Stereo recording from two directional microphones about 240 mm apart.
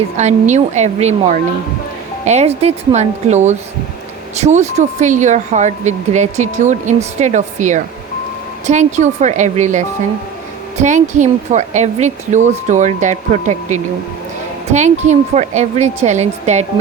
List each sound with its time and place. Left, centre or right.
0.2 s speech: right